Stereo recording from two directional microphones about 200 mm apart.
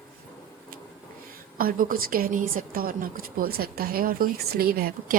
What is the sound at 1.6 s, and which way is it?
A woman's voice, 45° right (ahead or behind).